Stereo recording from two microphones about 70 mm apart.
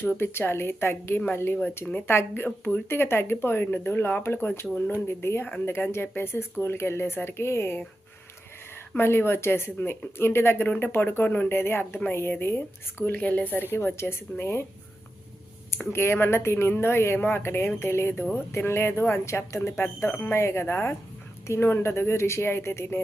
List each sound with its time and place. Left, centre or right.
0.0 s speech: left
9.0 s speech: left
15.9 s speech: left
19.7 s speech: left
20.3 s speech: left